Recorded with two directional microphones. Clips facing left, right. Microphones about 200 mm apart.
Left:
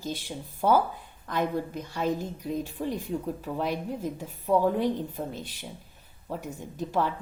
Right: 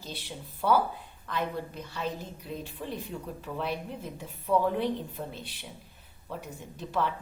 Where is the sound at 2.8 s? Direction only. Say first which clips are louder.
Left 6 dB; 40° left (ahead or behind).